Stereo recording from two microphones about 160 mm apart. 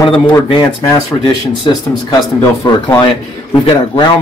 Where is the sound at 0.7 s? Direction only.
25° left (ahead or behind).